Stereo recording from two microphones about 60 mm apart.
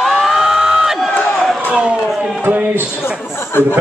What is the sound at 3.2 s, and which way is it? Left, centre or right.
Speech, left.